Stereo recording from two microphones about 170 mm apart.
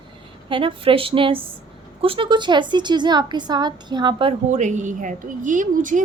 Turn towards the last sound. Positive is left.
turn(degrees=-50)  # may be behind; listen again after turning